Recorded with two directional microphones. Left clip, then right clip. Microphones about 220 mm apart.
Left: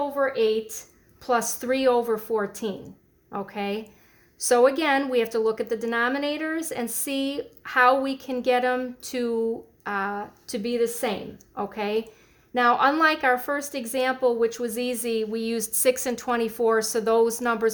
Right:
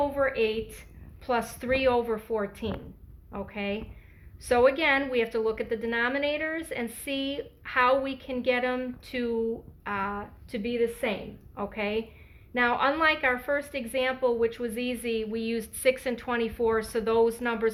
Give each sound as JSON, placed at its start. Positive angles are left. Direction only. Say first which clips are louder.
{"t": 0.2, "sound": "a woman's voice", "louder": "left 4 dB", "side_deg": 45}